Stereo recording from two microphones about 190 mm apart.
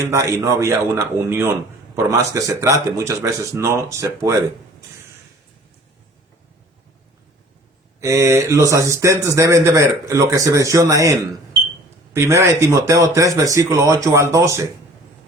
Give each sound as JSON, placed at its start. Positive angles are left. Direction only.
{"t": 0.0, "sound": "speech", "side_deg": -15}
{"t": 8.0, "sound": "speech", "side_deg": -15}